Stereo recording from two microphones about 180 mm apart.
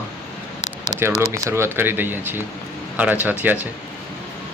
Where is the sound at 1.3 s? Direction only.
15° right (ahead or behind).